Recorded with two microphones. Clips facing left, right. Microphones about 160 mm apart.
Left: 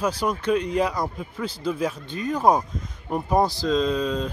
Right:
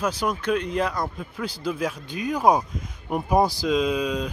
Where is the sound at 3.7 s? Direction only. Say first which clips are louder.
Even; 15° right (ahead or behind).